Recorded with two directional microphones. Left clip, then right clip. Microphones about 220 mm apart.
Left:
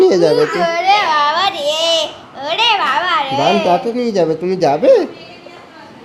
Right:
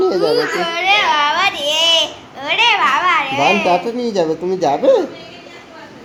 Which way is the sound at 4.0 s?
35° left (ahead or behind).